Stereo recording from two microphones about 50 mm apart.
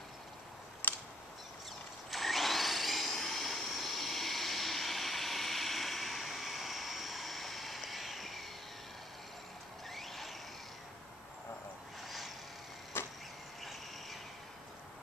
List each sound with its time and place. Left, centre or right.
0.8 s a sound: left
2.0 s vacuum cleaner: centre
9.8 s vehicle: centre
12.9 s vehicle: left